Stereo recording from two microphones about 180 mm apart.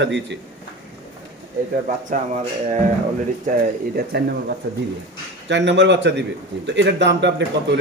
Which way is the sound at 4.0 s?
60° right (ahead or behind).